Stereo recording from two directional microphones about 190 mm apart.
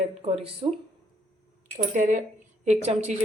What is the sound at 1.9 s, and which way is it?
A woman's voice, 45° right (ahead or behind).